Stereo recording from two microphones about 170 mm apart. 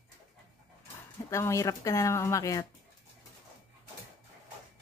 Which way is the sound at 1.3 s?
15° left (ahead or behind).